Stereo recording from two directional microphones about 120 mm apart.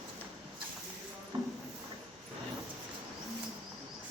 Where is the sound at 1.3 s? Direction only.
40° right (ahead or behind).